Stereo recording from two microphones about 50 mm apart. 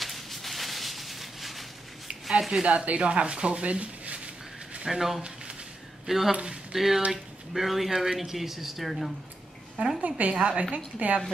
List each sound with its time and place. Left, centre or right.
0.0 s a sound: centre
2.6 s speech: right
4.8 s speech: centre
6.3 s speech: right
6.7 s speech: centre
9.9 s a woman's voice: right